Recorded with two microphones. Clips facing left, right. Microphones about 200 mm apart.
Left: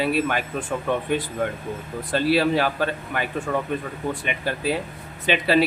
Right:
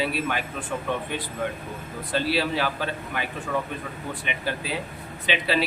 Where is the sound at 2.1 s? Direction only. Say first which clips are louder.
Left 5 dB; 50° left (ahead or behind).